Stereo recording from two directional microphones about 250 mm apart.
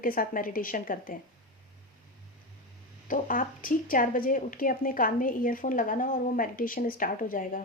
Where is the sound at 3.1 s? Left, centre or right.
Left.